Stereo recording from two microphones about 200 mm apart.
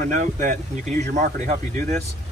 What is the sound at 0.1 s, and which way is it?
Speech, 40° right (ahead or behind).